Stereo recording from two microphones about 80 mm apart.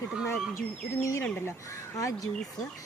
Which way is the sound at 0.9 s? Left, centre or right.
Left.